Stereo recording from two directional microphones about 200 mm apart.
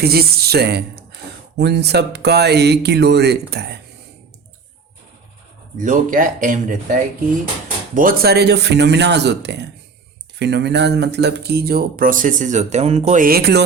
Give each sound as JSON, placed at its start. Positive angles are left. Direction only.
{"t": 0.0, "sound": "speech", "side_deg": -50}
{"t": 5.7, "sound": "speech", "side_deg": -40}
{"t": 7.9, "sound": "speech", "side_deg": -45}